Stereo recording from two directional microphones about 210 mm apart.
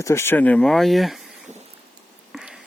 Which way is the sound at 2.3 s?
Centre (ahead or behind).